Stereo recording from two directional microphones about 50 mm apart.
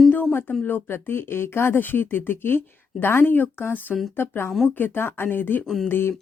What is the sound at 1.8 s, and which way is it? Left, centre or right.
Speech, left.